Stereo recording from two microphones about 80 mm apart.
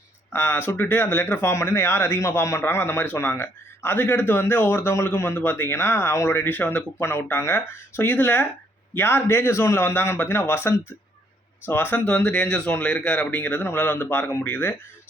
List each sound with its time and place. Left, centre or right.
0.3 s a man's voice: left